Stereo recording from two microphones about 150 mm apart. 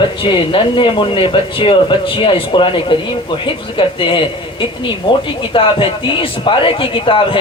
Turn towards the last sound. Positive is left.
turn(degrees=35)  # may be behind; listen again after turning